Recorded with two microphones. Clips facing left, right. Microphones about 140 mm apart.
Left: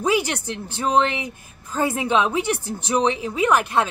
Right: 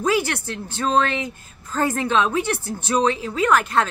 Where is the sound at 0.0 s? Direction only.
15° left (ahead or behind).